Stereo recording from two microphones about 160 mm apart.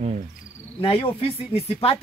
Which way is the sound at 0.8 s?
35° left (ahead or behind).